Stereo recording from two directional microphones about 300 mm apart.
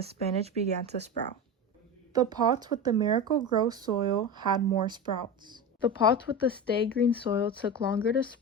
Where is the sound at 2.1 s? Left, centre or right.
Centre.